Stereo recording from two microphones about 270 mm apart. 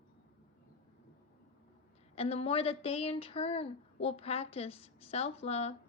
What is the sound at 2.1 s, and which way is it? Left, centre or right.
Speech, left.